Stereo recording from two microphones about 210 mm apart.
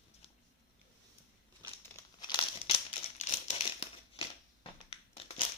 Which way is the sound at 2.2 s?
20° left (ahead or behind).